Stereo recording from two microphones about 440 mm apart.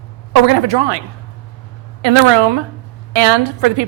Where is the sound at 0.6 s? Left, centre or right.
Right.